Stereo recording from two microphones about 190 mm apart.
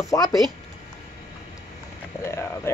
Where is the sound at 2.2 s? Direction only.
15° left (ahead or behind).